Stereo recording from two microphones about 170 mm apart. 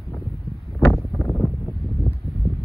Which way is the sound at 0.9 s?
15° left (ahead or behind).